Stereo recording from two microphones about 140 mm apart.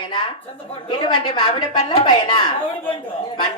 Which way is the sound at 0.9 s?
35° left (ahead or behind).